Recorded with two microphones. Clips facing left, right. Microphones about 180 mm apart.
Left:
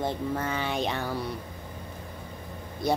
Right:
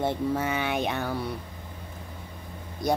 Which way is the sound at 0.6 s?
60° right (ahead or behind).